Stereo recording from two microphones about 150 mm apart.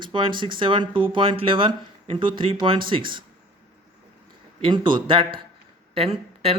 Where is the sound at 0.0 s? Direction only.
35° right (ahead or behind).